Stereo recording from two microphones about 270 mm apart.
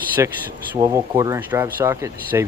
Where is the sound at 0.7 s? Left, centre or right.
Centre.